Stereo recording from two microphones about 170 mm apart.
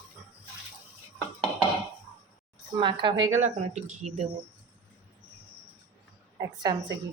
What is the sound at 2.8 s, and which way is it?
Speech, 30° right (ahead or behind).